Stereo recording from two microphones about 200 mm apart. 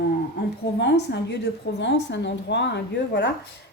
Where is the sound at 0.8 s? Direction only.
60° left (ahead or behind).